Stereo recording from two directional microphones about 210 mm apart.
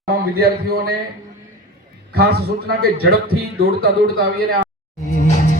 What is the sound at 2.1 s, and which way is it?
A man's voice, 50° right (ahead or behind).